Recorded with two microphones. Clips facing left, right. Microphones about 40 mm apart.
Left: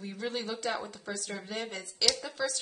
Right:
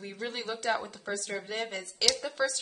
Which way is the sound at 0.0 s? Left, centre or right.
Centre.